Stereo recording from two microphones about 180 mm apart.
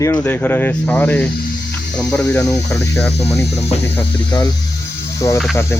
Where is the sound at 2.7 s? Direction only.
15° left (ahead or behind).